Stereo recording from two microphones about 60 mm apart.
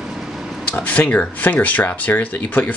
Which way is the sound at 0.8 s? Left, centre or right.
Left.